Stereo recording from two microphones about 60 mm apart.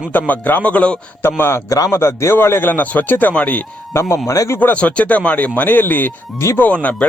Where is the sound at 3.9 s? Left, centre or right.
Left.